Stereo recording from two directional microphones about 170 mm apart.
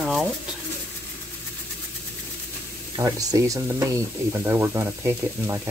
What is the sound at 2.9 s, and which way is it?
Sizzle, 20° right (ahead or behind).